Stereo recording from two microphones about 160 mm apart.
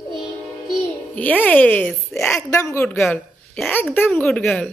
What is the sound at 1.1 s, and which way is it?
Speech, 10° left (ahead or behind).